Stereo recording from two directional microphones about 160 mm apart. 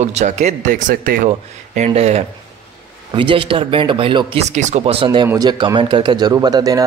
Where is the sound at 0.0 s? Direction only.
45° right (ahead or behind); by 1.2 s 60° right (ahead or behind).